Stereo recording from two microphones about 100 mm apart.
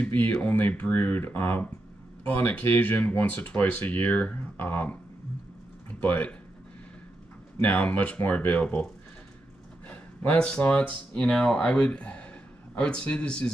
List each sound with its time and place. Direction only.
0.0 s speech: 15° left (ahead or behind)
5.9 s speech: 15° left (ahead or behind)
7.6 s speech: 15° left (ahead or behind)
9.8 s speech: 15° left (ahead or behind)